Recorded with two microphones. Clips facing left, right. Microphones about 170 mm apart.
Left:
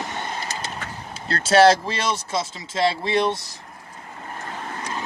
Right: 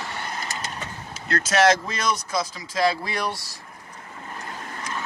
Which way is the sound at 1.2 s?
30° left (ahead or behind).